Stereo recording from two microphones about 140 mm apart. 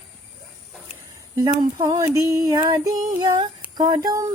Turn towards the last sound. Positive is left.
turn(degrees=-25)  # may be behind; listen again after turning